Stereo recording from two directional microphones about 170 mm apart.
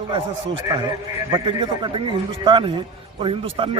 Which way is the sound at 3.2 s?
30° right (ahead or behind).